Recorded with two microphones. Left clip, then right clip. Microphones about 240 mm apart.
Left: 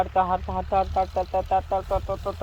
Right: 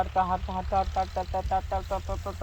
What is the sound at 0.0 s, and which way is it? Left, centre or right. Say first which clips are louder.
Speech: left 4 dB; left.